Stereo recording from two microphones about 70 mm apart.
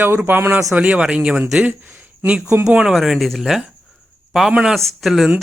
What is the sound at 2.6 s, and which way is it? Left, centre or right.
A man's voice, centre.